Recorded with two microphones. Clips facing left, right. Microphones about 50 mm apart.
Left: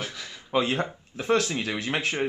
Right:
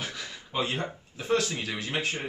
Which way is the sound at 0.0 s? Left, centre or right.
Centre.